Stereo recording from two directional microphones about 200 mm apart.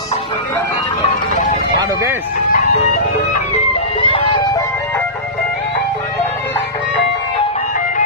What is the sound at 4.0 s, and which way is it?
Vehicle, 25° left (ahead or behind).